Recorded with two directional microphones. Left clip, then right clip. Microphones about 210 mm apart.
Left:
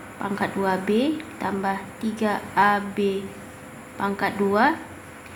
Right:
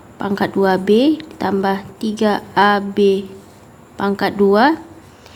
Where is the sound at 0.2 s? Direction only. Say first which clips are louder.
Right 8 dB; 45° right (ahead or behind).